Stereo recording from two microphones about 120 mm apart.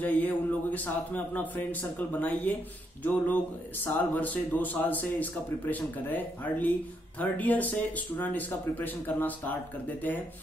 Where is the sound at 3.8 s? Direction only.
15° left (ahead or behind).